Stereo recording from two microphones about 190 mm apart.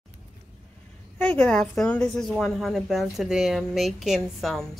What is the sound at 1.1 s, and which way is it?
A woman's voice, 5° left (ahead or behind).